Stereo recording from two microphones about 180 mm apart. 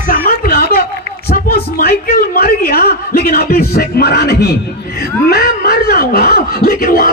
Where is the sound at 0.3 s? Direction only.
55° left (ahead or behind).